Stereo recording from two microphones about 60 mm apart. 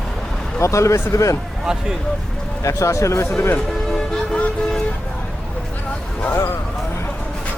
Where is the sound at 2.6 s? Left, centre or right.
Left.